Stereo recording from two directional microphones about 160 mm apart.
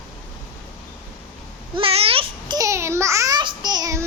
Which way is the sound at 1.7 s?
35° right (ahead or behind).